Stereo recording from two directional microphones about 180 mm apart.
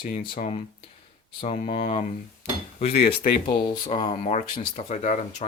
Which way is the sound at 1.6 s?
45° left (ahead or behind).